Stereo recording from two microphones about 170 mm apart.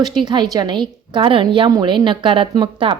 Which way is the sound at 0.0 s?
25° right (ahead or behind).